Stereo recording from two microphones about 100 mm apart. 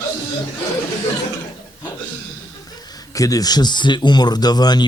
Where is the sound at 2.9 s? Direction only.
35° left (ahead or behind).